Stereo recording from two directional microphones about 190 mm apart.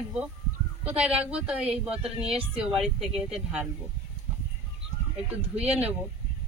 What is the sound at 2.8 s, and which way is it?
Speech, centre (ahead or behind).